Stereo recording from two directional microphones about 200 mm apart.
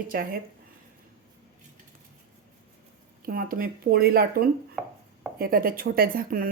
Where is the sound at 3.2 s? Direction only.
45° right (ahead or behind).